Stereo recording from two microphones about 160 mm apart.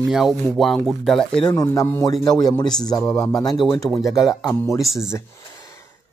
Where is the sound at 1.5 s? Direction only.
20° left (ahead or behind).